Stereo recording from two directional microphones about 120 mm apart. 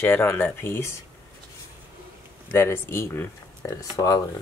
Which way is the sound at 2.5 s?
20° left (ahead or behind).